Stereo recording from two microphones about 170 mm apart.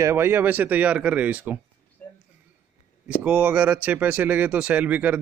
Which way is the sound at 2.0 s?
10° left (ahead or behind).